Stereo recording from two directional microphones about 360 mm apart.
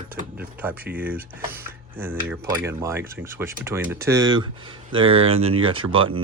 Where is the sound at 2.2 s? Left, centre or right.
Centre.